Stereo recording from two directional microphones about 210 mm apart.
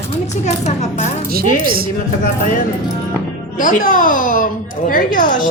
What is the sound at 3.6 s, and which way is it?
A child's voice, 40° left (ahead or behind).